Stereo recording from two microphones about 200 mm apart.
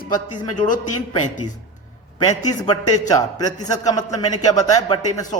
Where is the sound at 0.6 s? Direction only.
40° left (ahead or behind).